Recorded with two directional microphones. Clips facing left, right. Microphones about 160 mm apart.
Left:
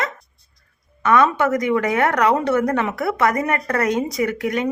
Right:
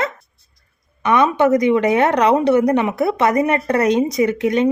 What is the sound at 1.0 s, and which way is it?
A woman's voice, 20° right (ahead or behind).